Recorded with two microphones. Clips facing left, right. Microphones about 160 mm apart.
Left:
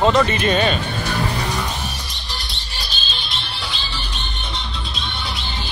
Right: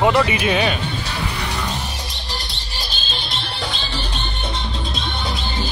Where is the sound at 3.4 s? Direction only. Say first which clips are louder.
Right 4 dB; 50° right (ahead or behind).